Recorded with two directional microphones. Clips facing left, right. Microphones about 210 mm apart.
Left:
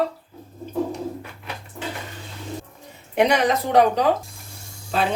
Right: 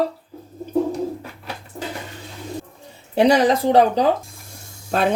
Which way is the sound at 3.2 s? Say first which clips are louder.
Right 4 dB; 30° right (ahead or behind).